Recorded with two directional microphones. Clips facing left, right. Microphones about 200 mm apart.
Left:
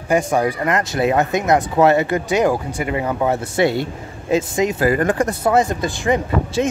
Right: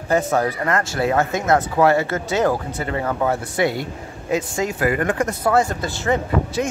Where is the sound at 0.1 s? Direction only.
15° left (ahead or behind).